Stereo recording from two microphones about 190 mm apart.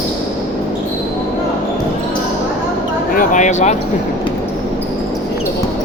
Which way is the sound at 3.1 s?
45° left (ahead or behind).